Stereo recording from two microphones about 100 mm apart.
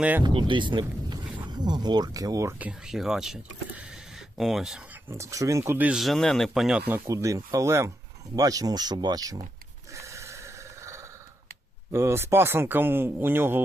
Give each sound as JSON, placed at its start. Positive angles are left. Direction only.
{"t": 0.2, "sound": "speech", "side_deg": -50}
{"t": 2.6, "sound": "speech", "side_deg": -15}
{"t": 2.9, "sound": "speech", "side_deg": -5}
{"t": 5.0, "sound": "speech", "side_deg": -30}
{"t": 6.0, "sound": "speech", "side_deg": 5}
{"t": 7.1, "sound": "speech", "side_deg": -35}
{"t": 9.9, "sound": "a sound", "side_deg": -30}
{"t": 11.9, "sound": "speech", "side_deg": -25}